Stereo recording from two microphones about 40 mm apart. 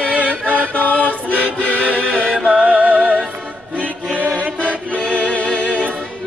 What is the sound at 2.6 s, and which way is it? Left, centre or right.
Music, right.